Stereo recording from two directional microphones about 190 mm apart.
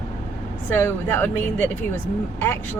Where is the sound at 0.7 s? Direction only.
10° left (ahead or behind).